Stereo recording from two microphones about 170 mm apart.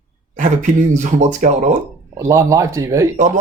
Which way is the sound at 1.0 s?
45° right (ahead or behind).